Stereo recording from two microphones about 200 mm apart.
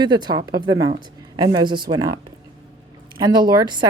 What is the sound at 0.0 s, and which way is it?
Speech, 20° right (ahead or behind).